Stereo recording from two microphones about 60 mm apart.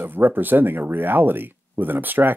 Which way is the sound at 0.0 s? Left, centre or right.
Right.